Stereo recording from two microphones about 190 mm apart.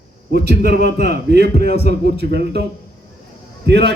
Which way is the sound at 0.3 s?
55° right (ahead or behind).